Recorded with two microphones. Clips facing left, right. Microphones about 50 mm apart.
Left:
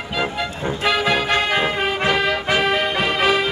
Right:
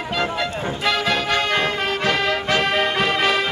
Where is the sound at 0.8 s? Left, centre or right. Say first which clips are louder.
Left 2 dB; centre.